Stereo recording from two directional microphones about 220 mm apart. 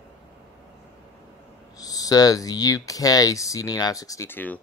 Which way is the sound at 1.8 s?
15° left (ahead or behind).